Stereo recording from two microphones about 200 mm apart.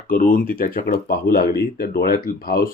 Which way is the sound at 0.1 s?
45° left (ahead or behind).